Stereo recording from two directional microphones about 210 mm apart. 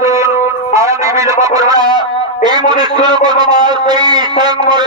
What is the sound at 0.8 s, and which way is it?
A man's voice, 15° right (ahead or behind).